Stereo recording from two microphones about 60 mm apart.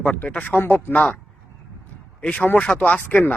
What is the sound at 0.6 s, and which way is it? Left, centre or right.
Speech, left.